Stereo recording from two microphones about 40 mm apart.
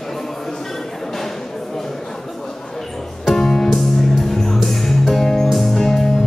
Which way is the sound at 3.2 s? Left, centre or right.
Centre.